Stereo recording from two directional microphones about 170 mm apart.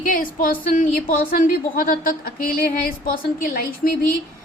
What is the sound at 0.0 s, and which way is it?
A woman's voice, 55° left (ahead or behind).